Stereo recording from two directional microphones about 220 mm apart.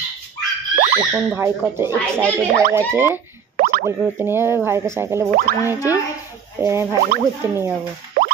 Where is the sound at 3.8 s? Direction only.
10° right (ahead or behind).